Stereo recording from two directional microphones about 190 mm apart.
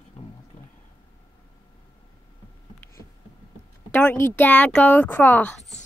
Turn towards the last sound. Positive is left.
turn(degrees=10)  # may be behind; listen again after turning